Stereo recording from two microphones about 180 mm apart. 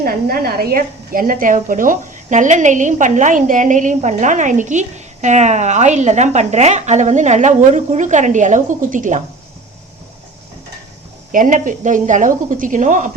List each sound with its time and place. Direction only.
0.0 s a woman's voice: 55° right (ahead or behind)
11.3 s a woman's voice: 45° right (ahead or behind)